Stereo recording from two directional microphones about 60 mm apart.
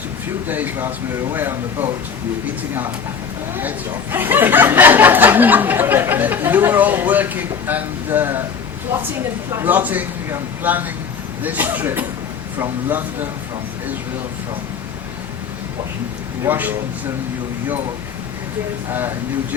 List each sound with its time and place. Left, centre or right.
0.4 s speech: right
3.6 s speech: right
9.6 s speech: right
16.5 s speech: right
18.9 s speech: right